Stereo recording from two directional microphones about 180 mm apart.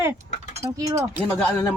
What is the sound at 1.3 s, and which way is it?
Speech, 10° left (ahead or behind).